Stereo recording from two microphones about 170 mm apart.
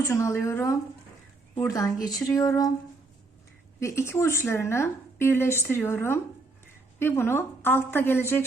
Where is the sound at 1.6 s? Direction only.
20° left (ahead or behind).